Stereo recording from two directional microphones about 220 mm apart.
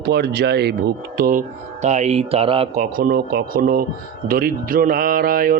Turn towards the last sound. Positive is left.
turn(degrees=-40)  # may be behind; listen again after turning